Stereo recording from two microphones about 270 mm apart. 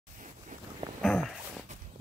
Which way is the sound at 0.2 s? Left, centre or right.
Right.